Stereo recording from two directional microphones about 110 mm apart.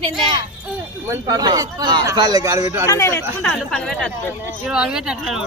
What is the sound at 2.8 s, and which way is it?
Speech, 30° left (ahead or behind).